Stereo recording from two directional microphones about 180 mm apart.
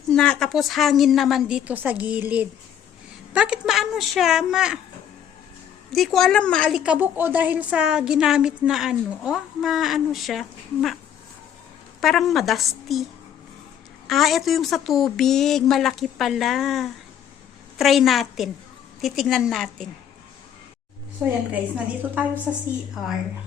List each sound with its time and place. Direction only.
0.1 s a woman's voice: 5° left (ahead or behind)
5.9 s a woman's voice: centre (ahead or behind)
11.9 s a woman's voice: centre (ahead or behind)
14.1 s a woman's voice: centre (ahead or behind)
21.2 s a woman's voice: 10° right (ahead or behind)